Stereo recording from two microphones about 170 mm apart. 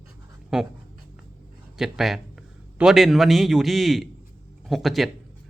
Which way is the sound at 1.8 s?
Centre (ahead or behind).